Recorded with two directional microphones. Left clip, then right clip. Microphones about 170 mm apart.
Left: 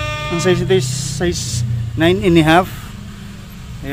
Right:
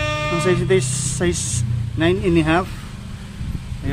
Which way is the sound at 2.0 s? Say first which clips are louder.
Left 5 dB; 20° left (ahead or behind).